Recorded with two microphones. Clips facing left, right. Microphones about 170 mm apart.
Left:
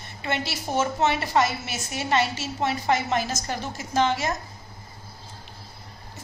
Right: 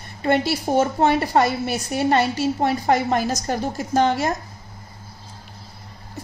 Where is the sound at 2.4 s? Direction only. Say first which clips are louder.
Right 7 dB; 50° right (ahead or behind).